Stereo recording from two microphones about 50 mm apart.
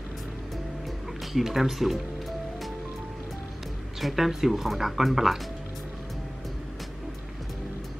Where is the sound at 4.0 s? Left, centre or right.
Centre.